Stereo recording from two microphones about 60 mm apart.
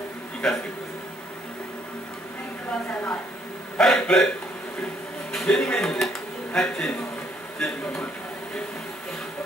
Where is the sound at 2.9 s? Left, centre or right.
Left.